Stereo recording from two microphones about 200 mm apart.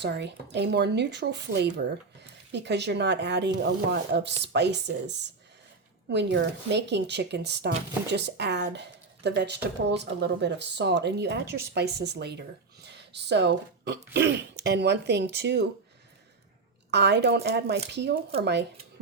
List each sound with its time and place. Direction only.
0.0 s speech: 60° right (ahead or behind)
16.9 s speech: 60° right (ahead or behind)